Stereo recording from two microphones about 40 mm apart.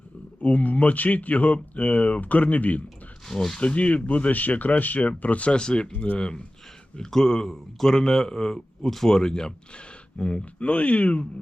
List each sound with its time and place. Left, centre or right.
0.4 s speech: left
3.2 s speech: centre
3.6 s speech: left